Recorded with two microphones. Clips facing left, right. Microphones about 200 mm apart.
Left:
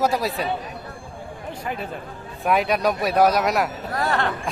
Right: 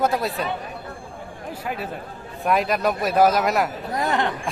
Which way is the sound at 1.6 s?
5° right (ahead or behind).